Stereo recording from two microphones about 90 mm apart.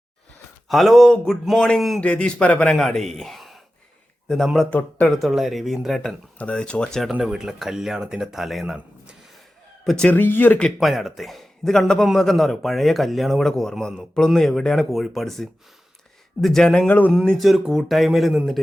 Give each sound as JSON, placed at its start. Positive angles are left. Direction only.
{"t": 0.7, "sound": "a man's voice", "side_deg": 0}
{"t": 4.7, "sound": "speech", "side_deg": 15}
{"t": 5.1, "sound": "a man's voice", "side_deg": 0}
{"t": 6.4, "sound": "speech", "side_deg": 10}
{"t": 7.1, "sound": "a man's voice", "side_deg": -10}
{"t": 10.1, "sound": "speech", "side_deg": 20}
{"t": 10.8, "sound": "a man's voice", "side_deg": 0}
{"t": 17.1, "sound": "a man's voice", "side_deg": 0}